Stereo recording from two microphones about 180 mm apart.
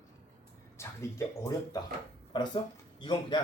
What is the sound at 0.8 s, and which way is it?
A man's voice, 15° left (ahead or behind).